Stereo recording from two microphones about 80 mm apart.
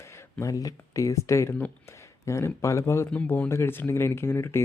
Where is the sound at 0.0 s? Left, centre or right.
Left.